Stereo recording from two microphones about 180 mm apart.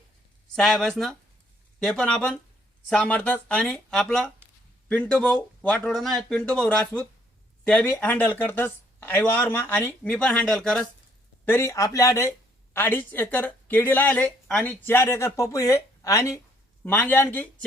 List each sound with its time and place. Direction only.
0.4 s speech: 5° left (ahead or behind)